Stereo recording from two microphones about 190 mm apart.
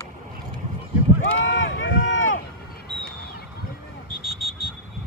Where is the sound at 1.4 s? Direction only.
85° left.